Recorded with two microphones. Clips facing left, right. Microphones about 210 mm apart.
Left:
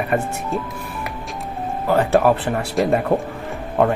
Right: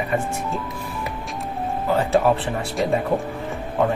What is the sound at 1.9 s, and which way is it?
Speech, 60° left (ahead or behind).